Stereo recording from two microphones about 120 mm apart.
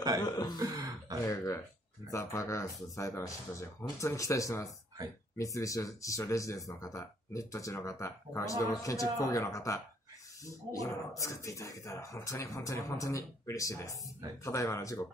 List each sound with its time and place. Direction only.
0.2 s throat clearing: 35° left (ahead or behind)
0.6 s throat clearing: 35° right (ahead or behind)
1.2 s a sound: 25° left (ahead or behind)
2.0 s speech: 25° left (ahead or behind)